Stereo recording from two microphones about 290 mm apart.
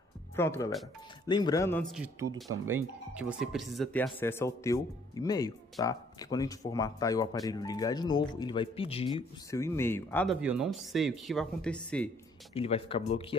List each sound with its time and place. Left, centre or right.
0.4 s speech: centre
12.5 s speech: centre